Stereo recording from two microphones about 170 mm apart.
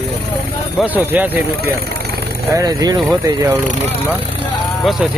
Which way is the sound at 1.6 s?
70° right (ahead or behind).